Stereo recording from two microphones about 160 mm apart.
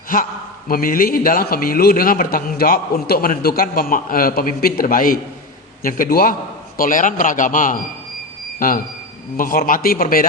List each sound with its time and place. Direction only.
0.7 s a man's voice: 65° left (ahead or behind)